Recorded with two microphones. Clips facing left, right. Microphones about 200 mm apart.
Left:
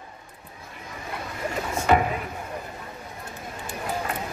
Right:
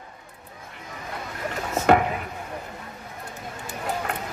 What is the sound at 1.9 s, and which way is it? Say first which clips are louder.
Speech: right 2 dB; 60° right (ahead or behind).